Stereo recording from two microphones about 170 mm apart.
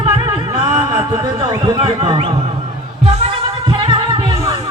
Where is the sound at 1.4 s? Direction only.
35° right (ahead or behind).